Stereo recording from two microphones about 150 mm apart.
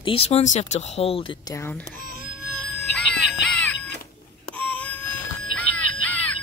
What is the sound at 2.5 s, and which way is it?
Music, 5° left (ahead or behind).